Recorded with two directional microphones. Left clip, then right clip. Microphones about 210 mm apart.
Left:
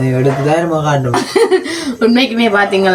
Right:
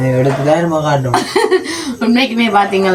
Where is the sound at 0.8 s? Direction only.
Centre (ahead or behind).